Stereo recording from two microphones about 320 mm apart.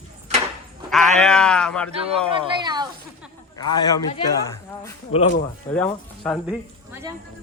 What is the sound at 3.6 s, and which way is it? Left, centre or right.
Speech, centre.